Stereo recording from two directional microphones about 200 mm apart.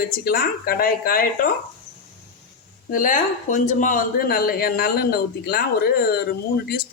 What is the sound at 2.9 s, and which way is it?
Speech, 40° left (ahead or behind).